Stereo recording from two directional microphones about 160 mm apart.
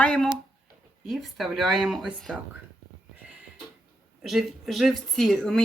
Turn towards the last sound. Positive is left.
turn(degrees=5)  # may be behind; listen again after turning